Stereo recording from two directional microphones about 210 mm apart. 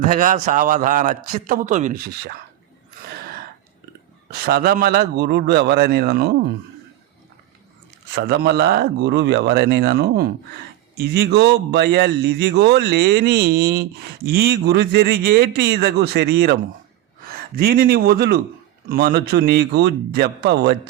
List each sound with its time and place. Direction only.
0.0 s a man's voice: 40° right (ahead or behind)
3.1 s gasp: 45° right (ahead or behind)
4.3 s speech: 50° right (ahead or behind)
8.1 s speech: 50° right (ahead or behind)